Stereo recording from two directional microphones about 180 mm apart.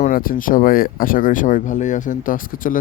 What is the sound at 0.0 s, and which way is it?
Speech, 50° left (ahead or behind).